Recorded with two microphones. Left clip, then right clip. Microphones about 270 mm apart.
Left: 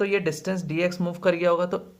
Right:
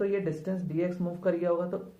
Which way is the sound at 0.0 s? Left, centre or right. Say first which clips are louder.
Left 5 dB; left.